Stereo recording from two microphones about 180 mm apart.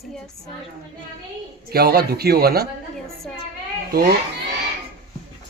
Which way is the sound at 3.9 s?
55° right (ahead or behind).